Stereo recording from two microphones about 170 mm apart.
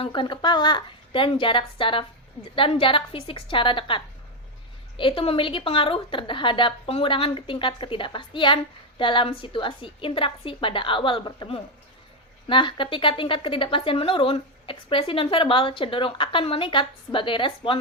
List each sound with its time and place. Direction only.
0.0 s a woman's voice: 30° left (ahead or behind)